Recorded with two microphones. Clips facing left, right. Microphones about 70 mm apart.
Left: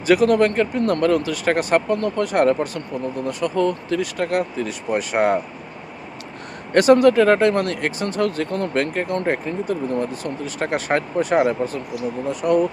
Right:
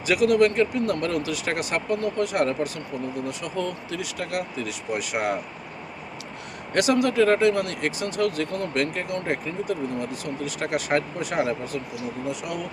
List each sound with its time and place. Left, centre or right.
0.0 s speech: left
3.2 s speech: left
6.7 s speech: left